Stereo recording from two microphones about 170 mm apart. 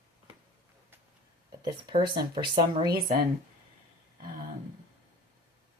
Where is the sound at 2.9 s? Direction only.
55° right (ahead or behind).